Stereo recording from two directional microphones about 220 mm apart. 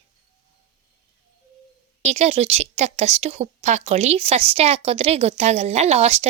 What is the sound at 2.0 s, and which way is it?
A woman's voice, 30° right (ahead or behind).